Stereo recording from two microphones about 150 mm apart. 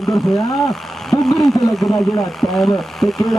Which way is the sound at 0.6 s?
Centre (ahead or behind).